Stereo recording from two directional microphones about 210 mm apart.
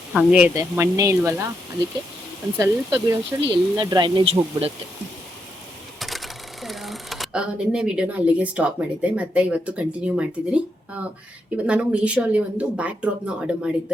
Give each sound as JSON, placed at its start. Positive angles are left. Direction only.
{"t": 0.1, "sound": "speech", "side_deg": -5}
{"t": 2.6, "sound": "speech", "side_deg": -15}
{"t": 6.0, "sound": "speech", "side_deg": 0}